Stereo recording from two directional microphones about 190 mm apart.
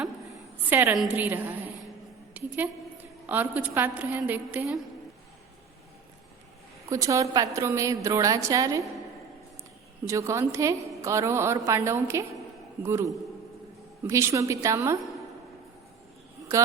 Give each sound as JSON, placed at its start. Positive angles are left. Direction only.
{"t": 0.6, "sound": "a woman's voice", "side_deg": -10}
{"t": 2.4, "sound": "a sound", "side_deg": -10}
{"t": 3.2, "sound": "a woman's voice", "side_deg": -10}
{"t": 6.9, "sound": "a woman's voice", "side_deg": -15}
{"t": 10.1, "sound": "a woman's voice", "side_deg": -15}
{"t": 14.1, "sound": "a woman's voice", "side_deg": -15}
{"t": 16.5, "sound": "speech", "side_deg": -15}